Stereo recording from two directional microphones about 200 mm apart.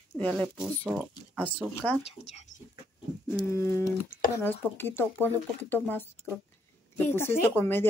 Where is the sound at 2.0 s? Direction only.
30° left (ahead or behind).